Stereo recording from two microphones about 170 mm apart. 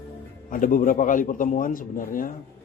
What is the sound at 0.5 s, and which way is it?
A man's voice, 50° left (ahead or behind).